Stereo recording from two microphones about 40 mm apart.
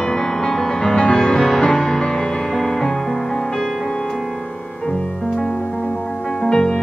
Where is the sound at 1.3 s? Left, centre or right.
Centre.